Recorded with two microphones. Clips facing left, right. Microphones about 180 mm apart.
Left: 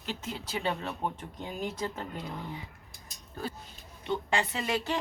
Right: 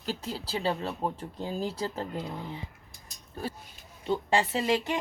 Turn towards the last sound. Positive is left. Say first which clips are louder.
# right 4 dB
turn(degrees=-25)  # may be behind; listen again after turning